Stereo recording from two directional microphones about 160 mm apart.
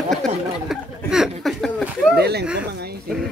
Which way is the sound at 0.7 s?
5° right (ahead or behind).